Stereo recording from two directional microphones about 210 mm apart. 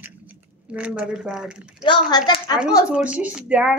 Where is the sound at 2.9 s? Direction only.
5° right (ahead or behind).